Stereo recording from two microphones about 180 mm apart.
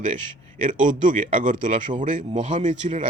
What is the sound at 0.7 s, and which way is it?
A man's voice, 45° right (ahead or behind).